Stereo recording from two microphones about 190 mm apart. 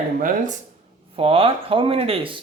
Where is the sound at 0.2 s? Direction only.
45° right (ahead or behind).